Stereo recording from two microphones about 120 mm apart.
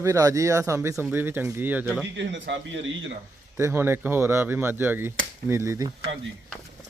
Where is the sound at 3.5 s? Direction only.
20° right (ahead or behind).